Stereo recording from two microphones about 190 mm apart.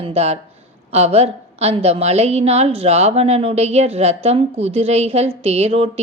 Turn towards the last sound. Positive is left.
turn(degrees=-30)  # may be behind; listen again after turning